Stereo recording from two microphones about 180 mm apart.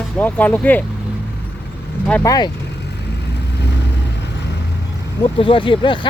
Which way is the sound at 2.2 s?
20° left (ahead or behind).